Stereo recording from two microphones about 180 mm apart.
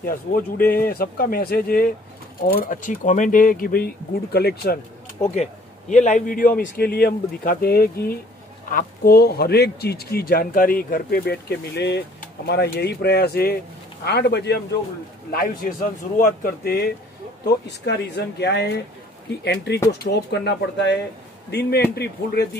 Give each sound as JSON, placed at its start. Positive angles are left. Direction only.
{"t": 0.0, "sound": "a man's voice", "side_deg": 55}
{"t": 5.3, "sound": "a man's voice", "side_deg": 40}
{"t": 15.3, "sound": "a man's voice", "side_deg": 55}